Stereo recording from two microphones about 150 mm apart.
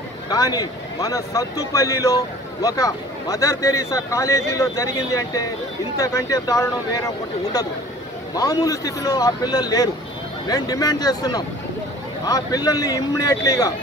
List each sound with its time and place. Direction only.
0.3 s speech: 25° left (ahead or behind)
8.4 s speech: 25° left (ahead or behind)